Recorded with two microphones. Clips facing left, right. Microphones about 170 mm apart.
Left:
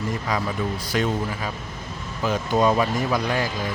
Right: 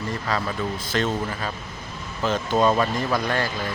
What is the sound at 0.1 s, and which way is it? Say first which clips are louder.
Speech: right 1 dB; 10° left (ahead or behind).